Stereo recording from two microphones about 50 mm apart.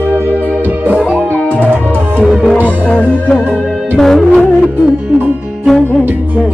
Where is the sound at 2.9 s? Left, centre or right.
Left.